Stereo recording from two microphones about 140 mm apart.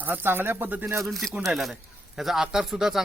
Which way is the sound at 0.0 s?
15° right (ahead or behind).